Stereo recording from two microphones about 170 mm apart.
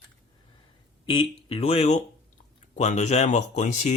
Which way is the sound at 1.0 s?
30° left (ahead or behind).